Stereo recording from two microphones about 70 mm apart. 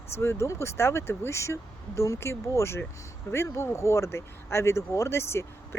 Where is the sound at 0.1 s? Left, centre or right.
Left.